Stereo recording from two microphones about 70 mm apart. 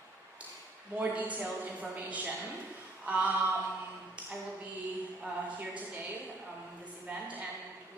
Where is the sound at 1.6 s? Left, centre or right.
Right.